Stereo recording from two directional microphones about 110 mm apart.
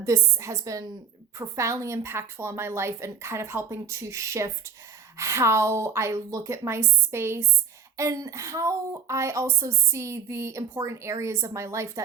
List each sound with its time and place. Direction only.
0.0 s a woman's voice: 30° right (ahead or behind)